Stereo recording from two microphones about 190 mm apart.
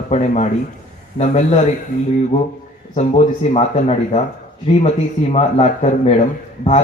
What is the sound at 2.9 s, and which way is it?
Speech, 35° left (ahead or behind).